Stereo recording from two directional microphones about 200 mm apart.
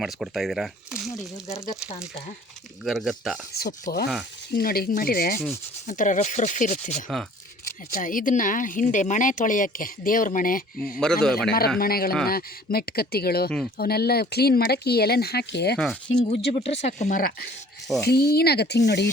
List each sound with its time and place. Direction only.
0.0 s speech: centre (ahead or behind)
1.5 s speech: 15° left (ahead or behind)
2.8 s speech: centre (ahead or behind)
3.5 s speech: 45° left (ahead or behind)
11.0 s speech: 5° left (ahead or behind)
11.8 s speech: 50° left (ahead or behind)
16.1 s speech: 30° left (ahead or behind); by 19.0 s 55° left (ahead or behind)